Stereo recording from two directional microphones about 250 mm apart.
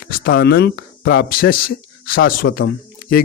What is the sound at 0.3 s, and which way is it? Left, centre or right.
A man's voice, left.